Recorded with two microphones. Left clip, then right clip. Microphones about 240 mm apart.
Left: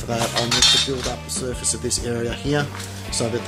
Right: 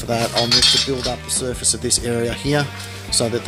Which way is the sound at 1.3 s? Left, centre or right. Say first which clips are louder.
Right 4 dB; right.